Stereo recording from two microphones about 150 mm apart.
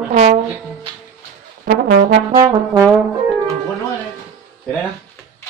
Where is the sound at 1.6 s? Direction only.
90° right.